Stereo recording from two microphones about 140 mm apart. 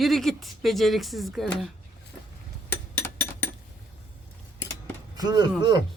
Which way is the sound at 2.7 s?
15° left (ahead or behind).